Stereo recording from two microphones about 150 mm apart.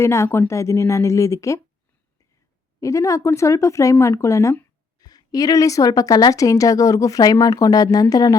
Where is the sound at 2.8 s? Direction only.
20° left (ahead or behind).